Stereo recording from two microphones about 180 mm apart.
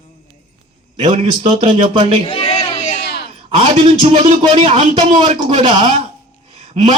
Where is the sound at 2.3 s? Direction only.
30° left (ahead or behind).